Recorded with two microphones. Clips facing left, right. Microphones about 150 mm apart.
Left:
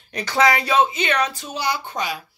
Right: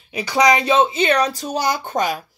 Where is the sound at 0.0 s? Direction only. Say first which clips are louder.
Right 2 dB; 10° right (ahead or behind).